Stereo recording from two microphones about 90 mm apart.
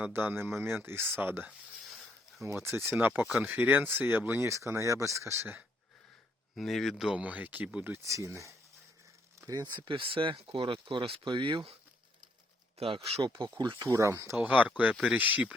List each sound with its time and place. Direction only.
0.0 s speech: 25° right (ahead or behind)
2.5 s speech: 30° right (ahead or behind)
6.6 s speech: centre (ahead or behind)
7.2 s speech: 15° right (ahead or behind)
7.9 s speech: 35° right (ahead or behind)
9.7 s speech: 70° right (ahead or behind)
12.8 s speech: 85° right; by 13.5 s 70° right (ahead or behind)
13.8 s speech: 35° right (ahead or behind)
14.3 s speech: 15° right (ahead or behind)